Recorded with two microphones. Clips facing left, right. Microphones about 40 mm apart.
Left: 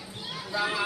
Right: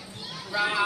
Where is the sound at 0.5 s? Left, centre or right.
Centre.